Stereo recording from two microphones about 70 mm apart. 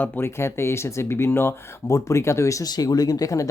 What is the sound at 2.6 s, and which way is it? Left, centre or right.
Speech, left.